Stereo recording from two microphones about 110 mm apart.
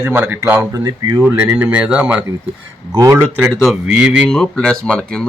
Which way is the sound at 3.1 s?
20° right (ahead or behind).